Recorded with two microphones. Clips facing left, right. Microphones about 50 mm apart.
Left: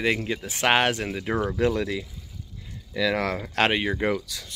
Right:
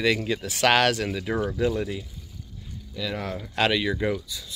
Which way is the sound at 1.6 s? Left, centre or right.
Left.